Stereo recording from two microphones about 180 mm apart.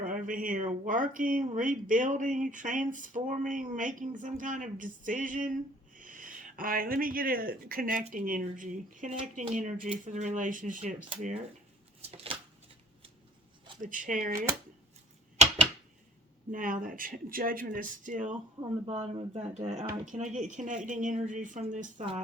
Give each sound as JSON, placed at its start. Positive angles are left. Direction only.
{"t": 0.0, "sound": "speech", "side_deg": -50}
{"t": 12.1, "sound": "a sound", "side_deg": -30}
{"t": 13.8, "sound": "speech", "side_deg": -50}
{"t": 16.5, "sound": "speech", "side_deg": -50}
{"t": 18.9, "sound": "speech", "side_deg": -30}